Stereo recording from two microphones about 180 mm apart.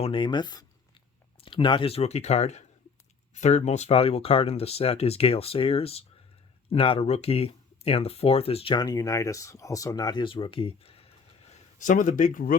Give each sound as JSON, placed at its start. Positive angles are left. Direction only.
{"t": 0.0, "sound": "speech", "side_deg": 25}